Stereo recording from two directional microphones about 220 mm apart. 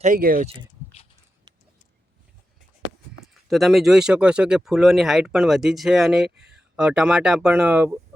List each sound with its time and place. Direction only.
0.0 s speech: 40° right (ahead or behind)
3.5 s speech: centre (ahead or behind)